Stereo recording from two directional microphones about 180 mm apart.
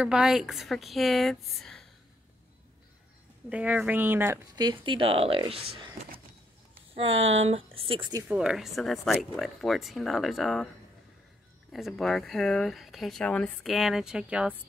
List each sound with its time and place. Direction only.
0.0 s speech: 5° right (ahead or behind)
3.4 s speech: 10° right (ahead or behind)
4.6 s speech: 25° right (ahead or behind)
6.9 s a sound: 30° right (ahead or behind)
7.2 s speech: 90° right
7.4 s speech: 30° right (ahead or behind)
8.2 s speech: 5° right (ahead or behind)
11.7 s speech: centre (ahead or behind)